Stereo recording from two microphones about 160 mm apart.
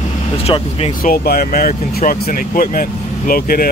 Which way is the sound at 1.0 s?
65° left (ahead or behind).